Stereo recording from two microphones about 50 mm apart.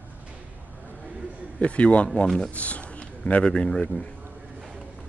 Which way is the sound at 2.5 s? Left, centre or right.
Left.